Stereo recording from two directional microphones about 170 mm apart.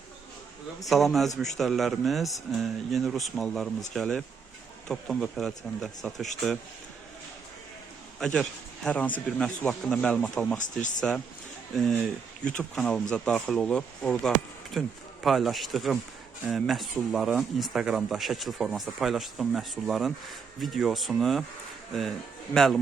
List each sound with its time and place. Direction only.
0.9 s speech: centre (ahead or behind)
8.2 s speech: 5° left (ahead or behind)
10.6 s speech: 50° left (ahead or behind)
12.5 s speech: 5° left (ahead or behind)
22.5 s speech: 5° left (ahead or behind)